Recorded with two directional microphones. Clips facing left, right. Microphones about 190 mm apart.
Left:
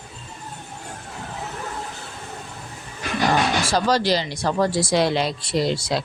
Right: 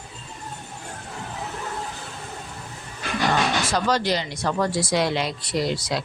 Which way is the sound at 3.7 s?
35° left (ahead or behind).